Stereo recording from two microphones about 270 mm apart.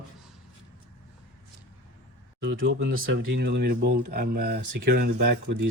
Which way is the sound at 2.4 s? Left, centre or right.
Right.